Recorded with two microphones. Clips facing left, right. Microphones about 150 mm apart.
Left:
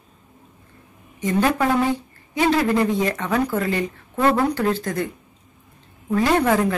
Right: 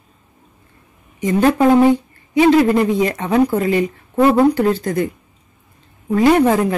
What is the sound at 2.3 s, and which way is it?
Speech, 15° right (ahead or behind).